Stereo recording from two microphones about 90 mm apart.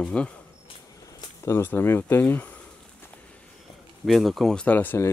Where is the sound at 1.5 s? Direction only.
25° left (ahead or behind).